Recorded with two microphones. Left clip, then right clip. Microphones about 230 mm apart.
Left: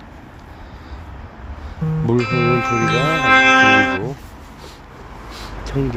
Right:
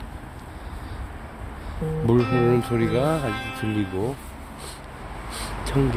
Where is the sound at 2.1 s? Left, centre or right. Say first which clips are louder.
Left 3 dB; left.